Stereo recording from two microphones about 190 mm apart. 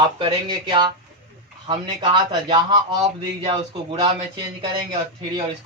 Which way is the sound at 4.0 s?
25° right (ahead or behind).